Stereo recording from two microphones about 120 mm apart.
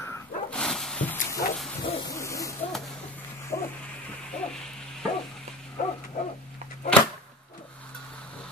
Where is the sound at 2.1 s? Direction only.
25° left (ahead or behind).